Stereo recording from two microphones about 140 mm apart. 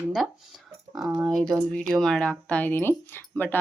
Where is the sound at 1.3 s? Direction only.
5° left (ahead or behind).